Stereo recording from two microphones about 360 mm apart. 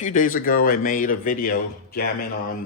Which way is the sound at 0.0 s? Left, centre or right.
Left.